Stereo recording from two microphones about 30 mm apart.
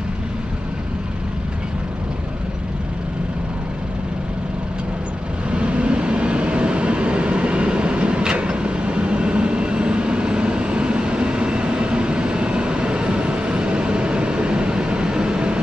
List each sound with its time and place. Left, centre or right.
5.5 s vehicle: right